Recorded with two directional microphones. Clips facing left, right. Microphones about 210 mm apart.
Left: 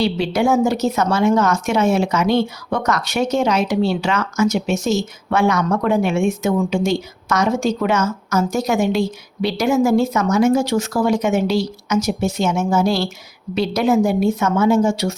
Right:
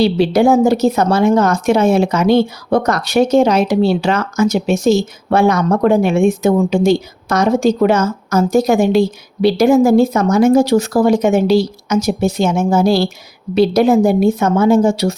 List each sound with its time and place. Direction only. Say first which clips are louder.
0.0 s speech: right 6 dB; 35° right (ahead or behind)